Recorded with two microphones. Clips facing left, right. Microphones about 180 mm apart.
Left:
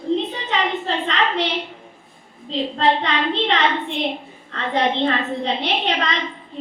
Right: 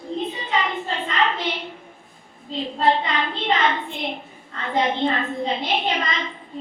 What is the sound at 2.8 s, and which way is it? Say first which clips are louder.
A child's voice: left 1 dB; 80° left.